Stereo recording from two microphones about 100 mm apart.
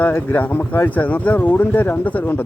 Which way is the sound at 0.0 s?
20° left (ahead or behind).